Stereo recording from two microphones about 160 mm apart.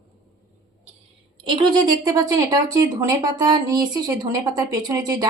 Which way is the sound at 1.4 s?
30° right (ahead or behind).